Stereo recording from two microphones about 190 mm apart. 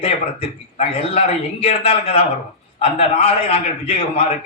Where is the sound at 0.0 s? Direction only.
30° left (ahead or behind).